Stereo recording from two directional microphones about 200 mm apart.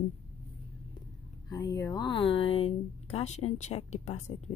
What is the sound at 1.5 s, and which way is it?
Speech, 20° left (ahead or behind).